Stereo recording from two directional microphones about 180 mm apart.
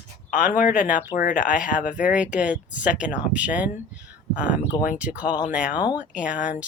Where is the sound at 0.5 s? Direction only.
50° left (ahead or behind).